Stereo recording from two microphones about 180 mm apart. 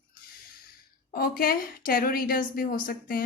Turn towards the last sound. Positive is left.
turn(degrees=55)  # may be behind; listen again after turning